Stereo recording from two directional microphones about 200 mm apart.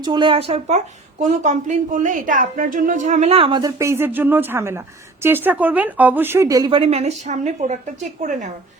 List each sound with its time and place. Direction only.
0.0 s a woman's voice: 25° right (ahead or behind)